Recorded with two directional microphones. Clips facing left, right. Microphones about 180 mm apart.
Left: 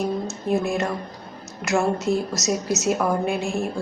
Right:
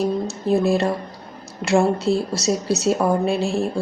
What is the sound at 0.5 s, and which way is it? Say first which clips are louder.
A woman's voice: right 5 dB; 35° right (ahead or behind).